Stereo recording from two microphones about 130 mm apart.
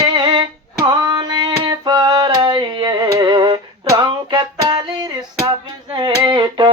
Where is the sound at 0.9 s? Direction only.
35° right (ahead or behind).